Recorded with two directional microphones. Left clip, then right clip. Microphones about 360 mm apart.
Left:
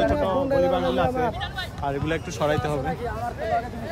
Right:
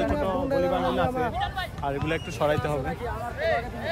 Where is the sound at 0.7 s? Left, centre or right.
Centre.